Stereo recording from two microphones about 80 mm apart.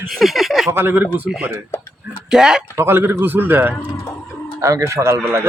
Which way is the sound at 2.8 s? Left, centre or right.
Right.